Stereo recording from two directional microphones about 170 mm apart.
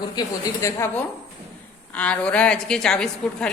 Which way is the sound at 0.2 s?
15° left (ahead or behind).